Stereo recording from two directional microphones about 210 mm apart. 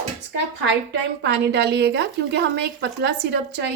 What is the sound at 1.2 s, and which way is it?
A woman's voice, 55° right (ahead or behind).